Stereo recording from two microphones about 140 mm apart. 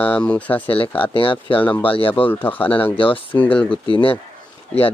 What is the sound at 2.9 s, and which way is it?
Speech, 40° left (ahead or behind).